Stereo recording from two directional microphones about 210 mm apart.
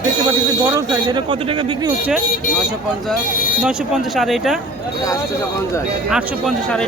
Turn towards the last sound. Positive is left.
turn(degrees=0)  # may be behind; listen again after turning